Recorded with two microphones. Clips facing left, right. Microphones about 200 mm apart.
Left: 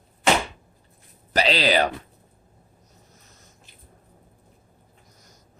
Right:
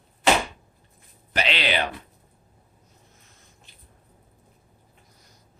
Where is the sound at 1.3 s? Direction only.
35° left (ahead or behind).